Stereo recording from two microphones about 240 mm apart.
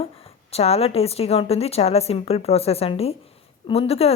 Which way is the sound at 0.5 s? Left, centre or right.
Left.